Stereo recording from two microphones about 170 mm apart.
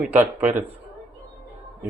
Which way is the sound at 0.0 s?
10° right (ahead or behind).